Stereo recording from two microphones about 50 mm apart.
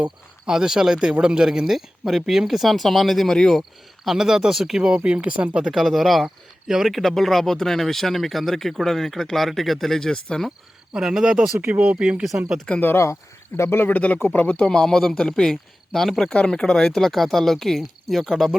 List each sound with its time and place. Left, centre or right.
0.4 s speech: centre
3.6 s speech: centre
5.0 s speech: right
5.7 s speech: centre
6.7 s speech: centre
6.9 s speech: centre
10.9 s speech: centre
11.8 s speech: right
12.7 s a man's voice: centre
13.7 s speech: left
14.0 s a man's voice: left
14.9 s a man's voice: centre
16.3 s speech: centre